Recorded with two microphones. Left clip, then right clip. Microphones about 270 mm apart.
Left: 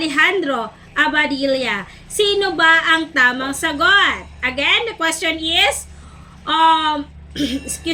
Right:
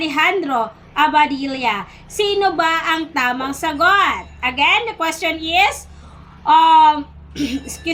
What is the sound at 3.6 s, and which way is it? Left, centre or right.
A woman's voice, right.